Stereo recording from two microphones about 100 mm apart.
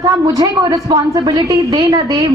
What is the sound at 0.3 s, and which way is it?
A woman's voice, 40° right (ahead or behind).